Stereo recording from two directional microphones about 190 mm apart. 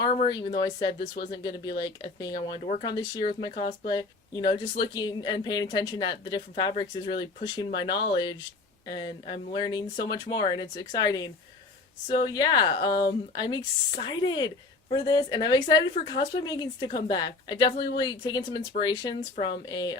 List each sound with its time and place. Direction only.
0.3 s speech: 25° left (ahead or behind)